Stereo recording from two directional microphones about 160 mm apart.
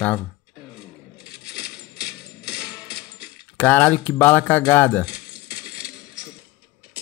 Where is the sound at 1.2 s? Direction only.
5° right (ahead or behind).